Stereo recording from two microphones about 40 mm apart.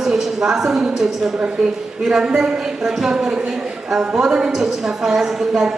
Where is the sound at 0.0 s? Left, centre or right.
Centre.